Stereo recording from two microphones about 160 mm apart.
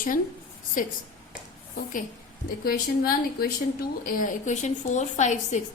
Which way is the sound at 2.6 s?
65° left (ahead or behind).